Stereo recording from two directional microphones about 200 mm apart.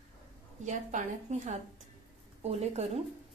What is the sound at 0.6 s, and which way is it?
A woman's voice, 40° right (ahead or behind).